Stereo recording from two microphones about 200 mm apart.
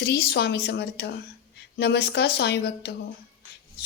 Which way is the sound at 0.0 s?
55° left (ahead or behind).